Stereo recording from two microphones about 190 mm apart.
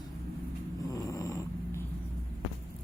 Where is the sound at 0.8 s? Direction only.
20° left (ahead or behind).